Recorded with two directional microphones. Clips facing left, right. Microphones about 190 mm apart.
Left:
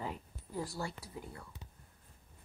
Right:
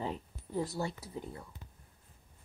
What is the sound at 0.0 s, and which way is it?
Speech, 25° right (ahead or behind).